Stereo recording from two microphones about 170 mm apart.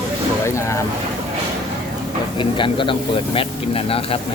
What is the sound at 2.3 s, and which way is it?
Speech, 30° left (ahead or behind).